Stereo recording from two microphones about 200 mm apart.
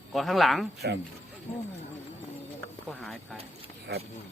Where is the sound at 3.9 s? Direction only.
55° right (ahead or behind).